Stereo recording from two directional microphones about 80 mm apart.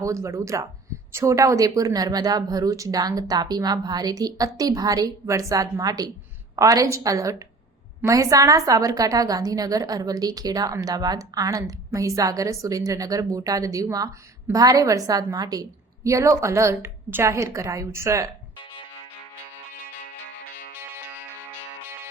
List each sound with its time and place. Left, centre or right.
0.0 s a woman's voice: right
16.0 s a woman's voice: right